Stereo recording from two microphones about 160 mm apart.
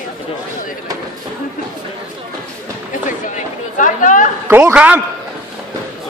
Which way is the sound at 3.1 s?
55° left (ahead or behind).